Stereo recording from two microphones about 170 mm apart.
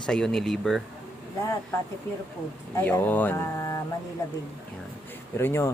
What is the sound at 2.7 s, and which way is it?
Speech, 10° left (ahead or behind).